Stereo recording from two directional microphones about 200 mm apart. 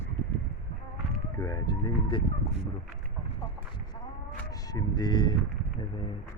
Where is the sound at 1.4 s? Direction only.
15° left (ahead or behind).